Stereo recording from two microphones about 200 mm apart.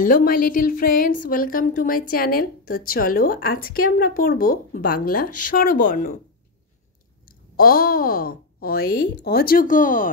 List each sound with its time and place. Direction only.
0.0 s speech: 45° left (ahead or behind)
7.5 s speech: 45° left (ahead or behind)